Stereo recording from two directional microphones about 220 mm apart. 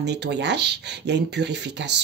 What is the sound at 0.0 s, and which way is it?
Speech, 50° right (ahead or behind).